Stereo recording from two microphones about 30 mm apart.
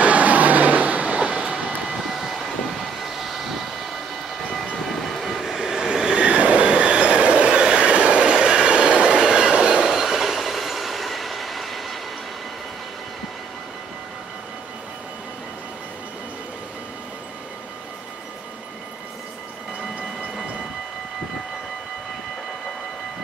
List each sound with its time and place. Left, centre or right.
0.0 s train: right
1.9 s vehicle: centre
4.6 s train: centre
5.6 s train: centre
6.1 s train: right
7.5 s train: right
7.9 s train: right; by 12.0 s centre